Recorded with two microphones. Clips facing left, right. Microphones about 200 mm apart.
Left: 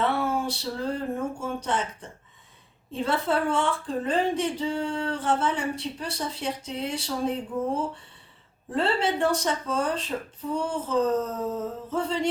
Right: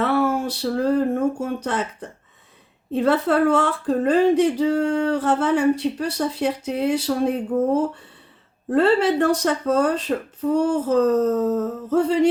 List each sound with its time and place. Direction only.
0.0 s speech: 65° right (ahead or behind)
8.7 s speech: 60° right (ahead or behind)
11.5 s a sound: 70° right (ahead or behind)